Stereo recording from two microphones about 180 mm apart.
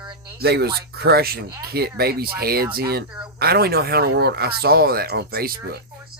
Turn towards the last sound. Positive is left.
turn(degrees=-60)  # may be behind; listen again after turning